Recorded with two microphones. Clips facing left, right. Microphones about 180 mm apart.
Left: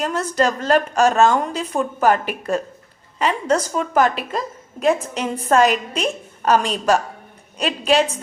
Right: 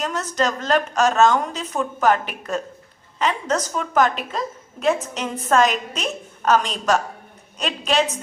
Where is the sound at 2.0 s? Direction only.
5° left (ahead or behind).